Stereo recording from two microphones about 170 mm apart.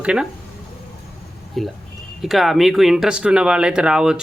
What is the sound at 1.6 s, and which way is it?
Speech, centre (ahead or behind).